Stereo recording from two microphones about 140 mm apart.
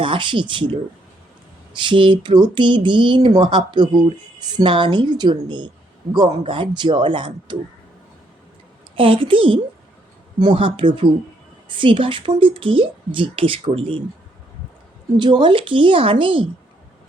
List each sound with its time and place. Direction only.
0.0 s speech: 35° right (ahead or behind)
1.8 s speech: 35° right (ahead or behind)
9.0 s speech: 40° right (ahead or behind)
15.2 s speech: 35° right (ahead or behind)